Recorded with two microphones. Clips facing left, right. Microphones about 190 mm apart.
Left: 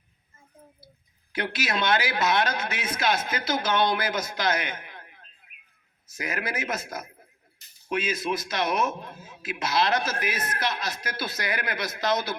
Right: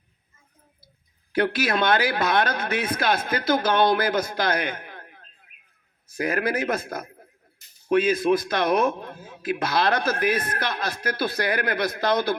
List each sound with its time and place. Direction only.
1.4 s a man's voice: 55° right (ahead or behind)